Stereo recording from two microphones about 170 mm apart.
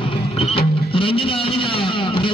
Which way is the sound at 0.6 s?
30° left (ahead or behind).